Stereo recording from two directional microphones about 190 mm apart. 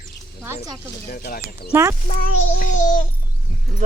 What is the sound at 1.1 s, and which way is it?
Speech, 50° left (ahead or behind).